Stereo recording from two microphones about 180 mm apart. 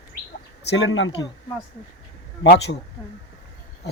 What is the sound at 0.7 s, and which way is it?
Speech, 85° left.